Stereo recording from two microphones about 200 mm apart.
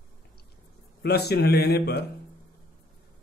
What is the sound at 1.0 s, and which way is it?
Speech, 55° left (ahead or behind).